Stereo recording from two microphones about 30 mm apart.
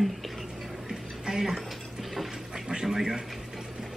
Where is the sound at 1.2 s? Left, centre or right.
Centre.